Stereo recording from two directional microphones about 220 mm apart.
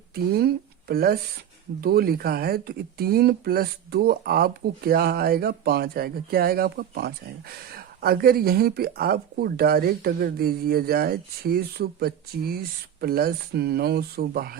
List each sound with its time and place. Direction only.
0.1 s speech: 45° right (ahead or behind)